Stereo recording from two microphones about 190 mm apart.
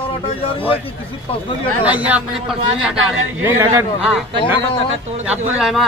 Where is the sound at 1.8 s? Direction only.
10° right (ahead or behind).